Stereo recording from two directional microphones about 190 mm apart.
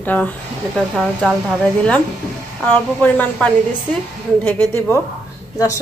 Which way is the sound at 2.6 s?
10° left (ahead or behind).